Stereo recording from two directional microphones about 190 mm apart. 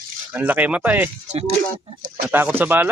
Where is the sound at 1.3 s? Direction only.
30° right (ahead or behind).